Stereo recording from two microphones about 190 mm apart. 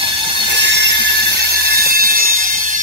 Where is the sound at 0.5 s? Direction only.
65° right (ahead or behind).